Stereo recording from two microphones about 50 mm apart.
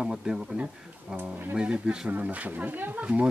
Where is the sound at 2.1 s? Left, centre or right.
Right.